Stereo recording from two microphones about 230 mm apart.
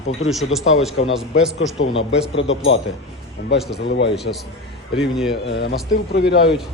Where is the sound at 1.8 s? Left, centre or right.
Left.